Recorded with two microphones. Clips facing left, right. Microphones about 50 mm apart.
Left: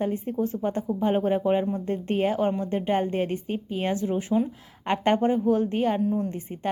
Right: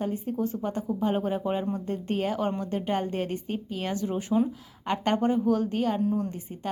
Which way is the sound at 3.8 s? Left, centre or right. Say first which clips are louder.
Left 4 dB; left.